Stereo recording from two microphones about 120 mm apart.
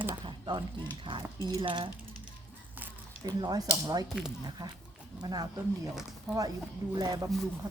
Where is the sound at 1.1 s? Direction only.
45° right (ahead or behind).